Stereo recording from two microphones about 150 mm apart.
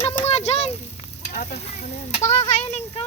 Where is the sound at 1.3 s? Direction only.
60° left (ahead or behind).